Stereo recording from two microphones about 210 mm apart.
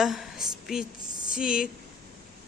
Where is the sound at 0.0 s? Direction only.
Centre (ahead or behind).